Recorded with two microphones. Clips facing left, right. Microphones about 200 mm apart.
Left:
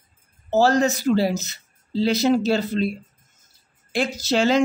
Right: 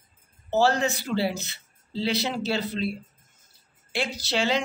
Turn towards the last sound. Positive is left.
turn(degrees=45)  # may be behind; listen again after turning